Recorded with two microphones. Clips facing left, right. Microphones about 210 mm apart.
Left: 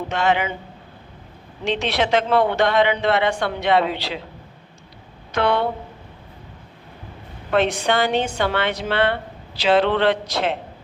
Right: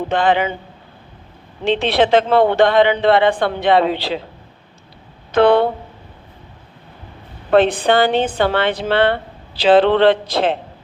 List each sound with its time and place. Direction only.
0.1 s a man's voice: 30° right (ahead or behind)
1.6 s a man's voice: 30° right (ahead or behind)
5.3 s a man's voice: 30° right (ahead or behind)
7.5 s a man's voice: 30° right (ahead or behind)